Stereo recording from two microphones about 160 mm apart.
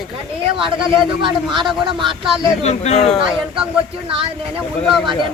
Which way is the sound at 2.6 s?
45° left (ahead or behind).